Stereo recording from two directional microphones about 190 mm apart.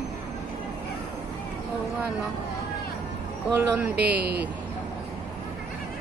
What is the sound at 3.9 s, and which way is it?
Speech, 60° right (ahead or behind).